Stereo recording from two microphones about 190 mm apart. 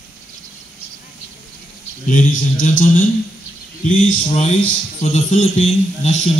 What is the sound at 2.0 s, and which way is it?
A man's voice, 45° left (ahead or behind).